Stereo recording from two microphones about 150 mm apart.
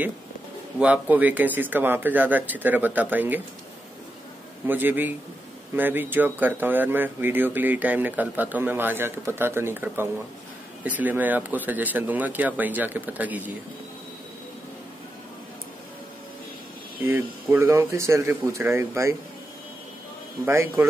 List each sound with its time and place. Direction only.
0.7 s speech: 10° right (ahead or behind)
4.6 s speech: 15° right (ahead or behind)
17.0 s speech: 15° right (ahead or behind)
20.4 s speech: 15° right (ahead or behind)